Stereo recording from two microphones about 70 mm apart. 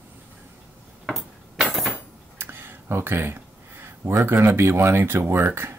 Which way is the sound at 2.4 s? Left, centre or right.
Right.